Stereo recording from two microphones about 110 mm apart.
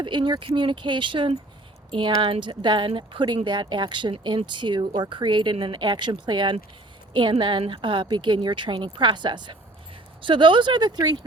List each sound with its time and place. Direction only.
0.0 s speech: 45° right (ahead or behind)